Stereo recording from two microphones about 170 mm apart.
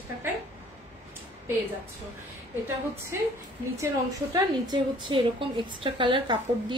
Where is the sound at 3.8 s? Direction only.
20° right (ahead or behind).